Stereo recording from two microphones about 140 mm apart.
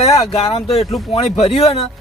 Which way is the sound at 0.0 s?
45° left (ahead or behind).